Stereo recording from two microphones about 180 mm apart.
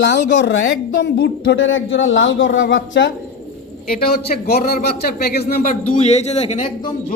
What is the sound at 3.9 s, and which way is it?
A man's voice, 55° left (ahead or behind).